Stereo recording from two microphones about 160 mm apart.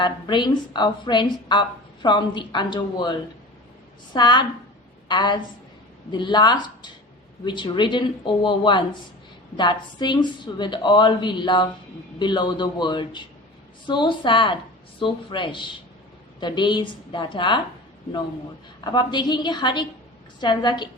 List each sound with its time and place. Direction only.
0.0 s a woman's voice: 30° left (ahead or behind)
18.8 s a woman's voice: 25° left (ahead or behind)